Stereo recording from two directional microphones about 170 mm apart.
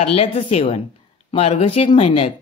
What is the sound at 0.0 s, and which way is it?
Speech, 35° left (ahead or behind).